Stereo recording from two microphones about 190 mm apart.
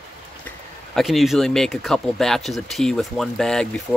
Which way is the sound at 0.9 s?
Centre (ahead or behind).